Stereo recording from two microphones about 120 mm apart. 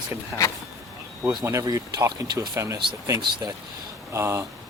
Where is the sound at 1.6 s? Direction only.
30° right (ahead or behind).